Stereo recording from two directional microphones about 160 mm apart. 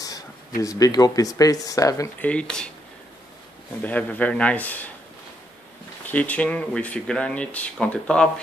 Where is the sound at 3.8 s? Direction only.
10° left (ahead or behind).